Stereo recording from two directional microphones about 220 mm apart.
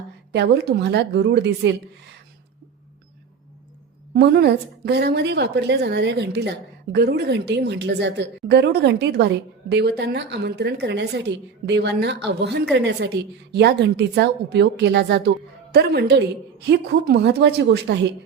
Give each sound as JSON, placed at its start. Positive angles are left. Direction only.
{"t": 0.3, "sound": "a woman's voice", "side_deg": -50}
{"t": 4.1, "sound": "a woman's voice", "side_deg": -45}